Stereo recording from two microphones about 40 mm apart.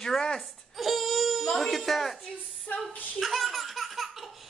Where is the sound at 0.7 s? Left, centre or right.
Centre.